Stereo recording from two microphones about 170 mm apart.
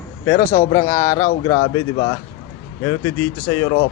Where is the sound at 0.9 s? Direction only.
20° left (ahead or behind).